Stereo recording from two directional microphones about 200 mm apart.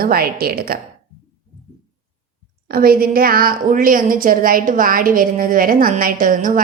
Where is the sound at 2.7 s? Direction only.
50° right (ahead or behind).